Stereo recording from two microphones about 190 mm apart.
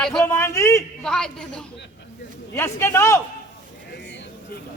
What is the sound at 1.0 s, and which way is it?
A woman's voice, 5° left (ahead or behind).